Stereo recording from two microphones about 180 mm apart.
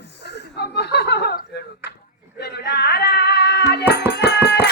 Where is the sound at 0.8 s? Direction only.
65° left (ahead or behind).